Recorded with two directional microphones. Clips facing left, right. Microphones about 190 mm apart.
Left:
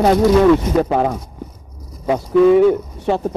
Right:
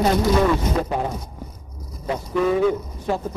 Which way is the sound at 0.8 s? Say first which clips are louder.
Left 7 dB; 90° left.